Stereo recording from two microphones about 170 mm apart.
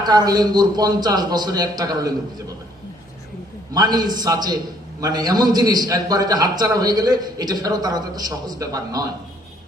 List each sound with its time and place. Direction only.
0.0 s a man's voice: 25° right (ahead or behind)
3.8 s a man's voice: 25° right (ahead or behind)